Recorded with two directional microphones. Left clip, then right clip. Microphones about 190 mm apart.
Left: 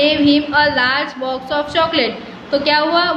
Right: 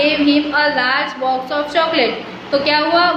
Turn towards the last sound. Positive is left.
turn(degrees=20)  # may be behind; listen again after turning